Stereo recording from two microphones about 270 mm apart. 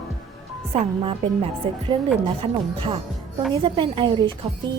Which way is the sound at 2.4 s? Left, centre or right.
Centre.